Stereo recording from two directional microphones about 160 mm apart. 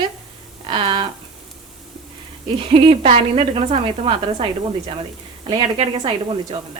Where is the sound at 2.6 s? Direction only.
35° right (ahead or behind).